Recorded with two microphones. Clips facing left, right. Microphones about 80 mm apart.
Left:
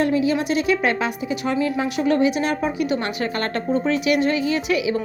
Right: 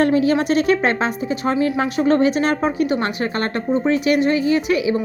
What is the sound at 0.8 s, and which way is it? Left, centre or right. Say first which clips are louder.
A woman's voice: right 2 dB; right.